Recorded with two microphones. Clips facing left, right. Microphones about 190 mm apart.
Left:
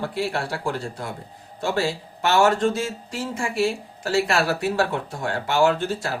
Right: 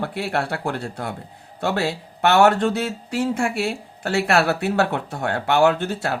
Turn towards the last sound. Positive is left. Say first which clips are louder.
# right 2 dB
turn(degrees=-60)  # may be behind; listen again after turning